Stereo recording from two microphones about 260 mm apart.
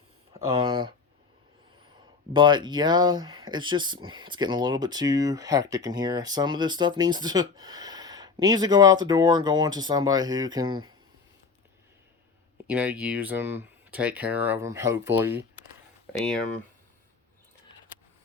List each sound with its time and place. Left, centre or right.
0.4 s speech: centre
2.3 s speech: centre
12.6 s speech: centre